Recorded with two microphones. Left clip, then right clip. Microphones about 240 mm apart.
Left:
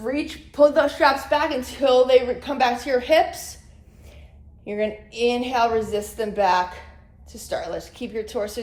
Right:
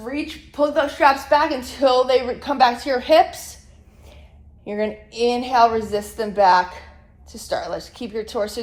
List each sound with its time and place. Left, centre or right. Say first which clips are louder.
0.0 s a woman's voice: left 1 dB; centre; by 3.4 s right
4.6 s a woman's voice: right 1 dB; right